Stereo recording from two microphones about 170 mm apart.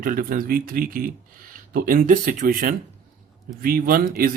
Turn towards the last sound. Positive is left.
turn(degrees=-60)  # may be behind; listen again after turning